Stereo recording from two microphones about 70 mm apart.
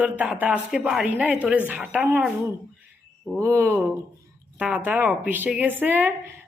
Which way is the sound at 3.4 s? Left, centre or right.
Right.